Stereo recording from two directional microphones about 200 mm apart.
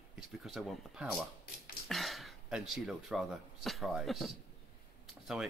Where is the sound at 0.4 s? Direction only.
Centre (ahead or behind).